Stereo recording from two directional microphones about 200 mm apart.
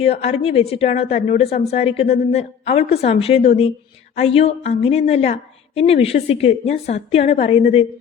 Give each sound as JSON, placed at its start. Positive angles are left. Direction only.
{"t": 0.0, "sound": "a woman's voice", "side_deg": 30}